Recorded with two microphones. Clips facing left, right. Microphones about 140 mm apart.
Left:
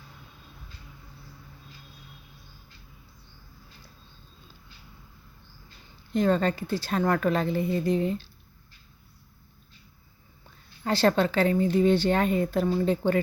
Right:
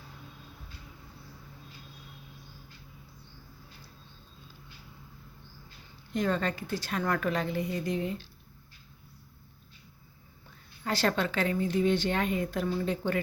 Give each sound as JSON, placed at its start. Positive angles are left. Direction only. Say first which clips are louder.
{"t": 6.1, "sound": "speech", "louder": "left 6 dB", "side_deg": 30}
{"t": 10.8, "sound": "speech", "louder": "left 6 dB", "side_deg": 30}